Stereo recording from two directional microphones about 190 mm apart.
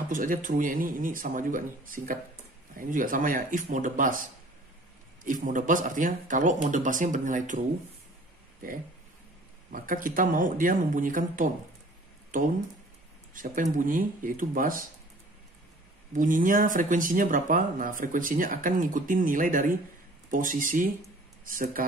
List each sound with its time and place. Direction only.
0.1 s speech: 45° right (ahead or behind)
9.7 s speech: 45° right (ahead or behind)
13.3 s speech: 45° right (ahead or behind)
16.2 s speech: 45° right (ahead or behind)